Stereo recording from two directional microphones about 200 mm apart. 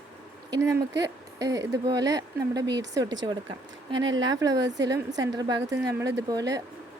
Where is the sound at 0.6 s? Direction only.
15° right (ahead or behind).